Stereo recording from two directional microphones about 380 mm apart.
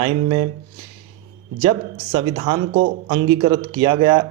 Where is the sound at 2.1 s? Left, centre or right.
Centre.